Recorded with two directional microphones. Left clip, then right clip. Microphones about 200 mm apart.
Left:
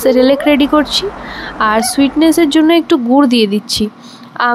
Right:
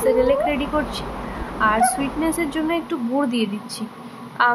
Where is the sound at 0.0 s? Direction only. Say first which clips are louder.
Left 7 dB; 40° left (ahead or behind).